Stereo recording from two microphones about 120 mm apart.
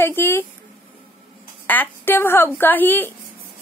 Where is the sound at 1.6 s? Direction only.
15° left (ahead or behind).